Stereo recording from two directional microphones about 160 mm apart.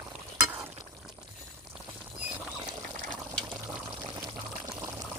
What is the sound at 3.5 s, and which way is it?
Pour, 25° right (ahead or behind).